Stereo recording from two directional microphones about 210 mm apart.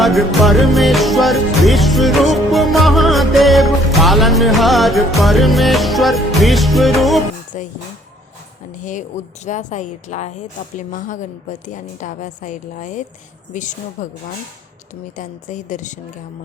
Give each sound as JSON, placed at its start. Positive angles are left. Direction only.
{"t": 0.0, "sound": "music", "side_deg": 0}
{"t": 7.5, "sound": "a woman's voice", "side_deg": 35}
{"t": 8.8, "sound": "a woman's voice", "side_deg": 35}